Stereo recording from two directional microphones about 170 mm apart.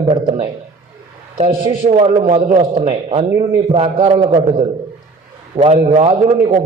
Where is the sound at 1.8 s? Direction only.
35° right (ahead or behind).